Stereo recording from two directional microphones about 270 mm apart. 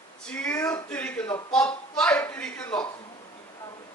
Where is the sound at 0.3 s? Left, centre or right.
Centre.